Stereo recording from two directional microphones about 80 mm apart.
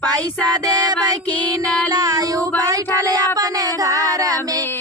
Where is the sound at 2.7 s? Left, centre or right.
Right.